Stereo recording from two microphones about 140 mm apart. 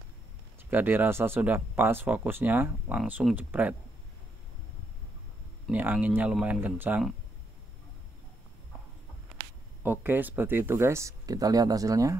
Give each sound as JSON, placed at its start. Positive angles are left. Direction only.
{"t": 0.7, "sound": "speech", "side_deg": -15}
{"t": 5.7, "sound": "speech", "side_deg": -10}
{"t": 9.8, "sound": "speech", "side_deg": -15}